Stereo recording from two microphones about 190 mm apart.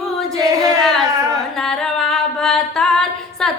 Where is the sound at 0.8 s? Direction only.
Centre (ahead or behind).